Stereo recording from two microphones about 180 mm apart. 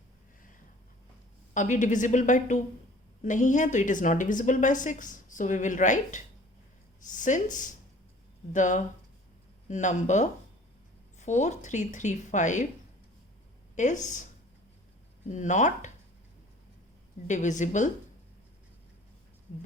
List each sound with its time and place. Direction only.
1.5 s a woman's voice: 45° left (ahead or behind)
13.7 s a woman's voice: 40° left (ahead or behind)
15.3 s a woman's voice: 40° left (ahead or behind)
17.2 s a woman's voice: 40° left (ahead or behind)